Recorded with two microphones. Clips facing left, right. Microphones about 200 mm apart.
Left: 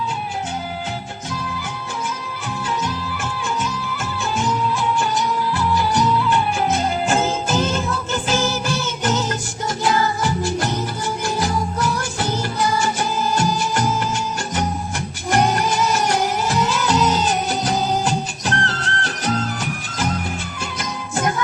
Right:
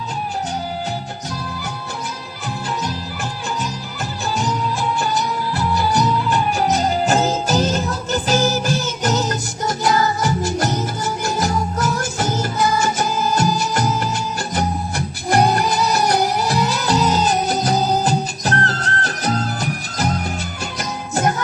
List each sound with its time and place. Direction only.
1.3 s music: 40° right (ahead or behind)
4.9 s music: 40° right (ahead or behind)